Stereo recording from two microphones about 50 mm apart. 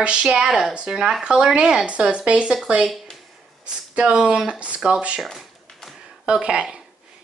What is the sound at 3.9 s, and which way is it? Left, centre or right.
Speech, centre.